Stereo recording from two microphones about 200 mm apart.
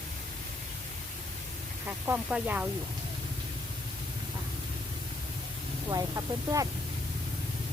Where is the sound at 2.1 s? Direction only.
5° right (ahead or behind).